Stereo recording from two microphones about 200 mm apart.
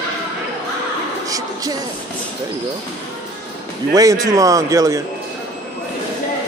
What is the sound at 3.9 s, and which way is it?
A man's voice, 15° right (ahead or behind).